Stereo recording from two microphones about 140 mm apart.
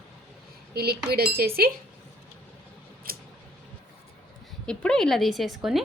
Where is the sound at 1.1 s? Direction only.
90° right.